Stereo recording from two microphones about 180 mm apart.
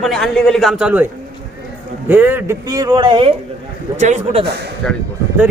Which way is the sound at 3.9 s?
40° right (ahead or behind).